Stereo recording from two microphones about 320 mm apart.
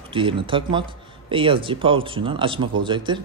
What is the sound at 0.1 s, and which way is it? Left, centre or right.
Speech, centre.